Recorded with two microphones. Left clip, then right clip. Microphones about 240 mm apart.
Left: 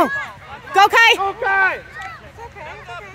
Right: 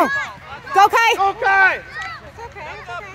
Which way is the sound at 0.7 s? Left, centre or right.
Centre.